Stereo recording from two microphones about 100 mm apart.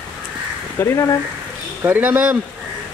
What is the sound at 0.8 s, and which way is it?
Speech, 30° left (ahead or behind).